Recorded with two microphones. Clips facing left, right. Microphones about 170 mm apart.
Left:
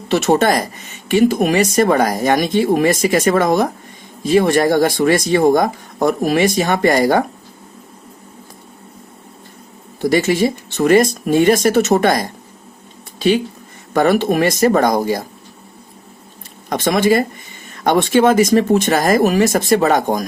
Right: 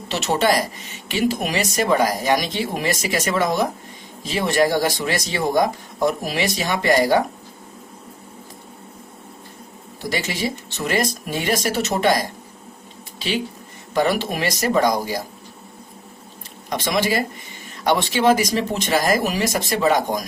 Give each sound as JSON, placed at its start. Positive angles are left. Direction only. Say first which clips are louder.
{"t": 0.1, "sound": "speech", "louder": "left 6 dB", "side_deg": 50}
{"t": 10.0, "sound": "speech", "louder": "left 10 dB", "side_deg": 55}
{"t": 13.1, "sound": "a sound", "louder": "left 10 dB", "side_deg": 50}
{"t": 13.9, "sound": "speech", "louder": "left 6 dB", "side_deg": 50}
{"t": 16.6, "sound": "speech", "louder": "left 7 dB", "side_deg": 50}